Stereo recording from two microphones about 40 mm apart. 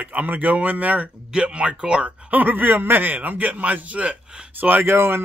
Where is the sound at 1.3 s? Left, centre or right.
Right.